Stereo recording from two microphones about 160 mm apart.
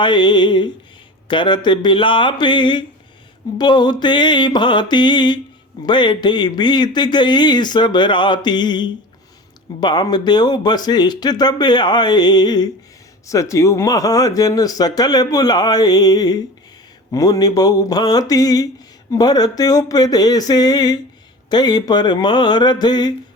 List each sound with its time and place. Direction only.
0.0 s speech: 30° left (ahead or behind)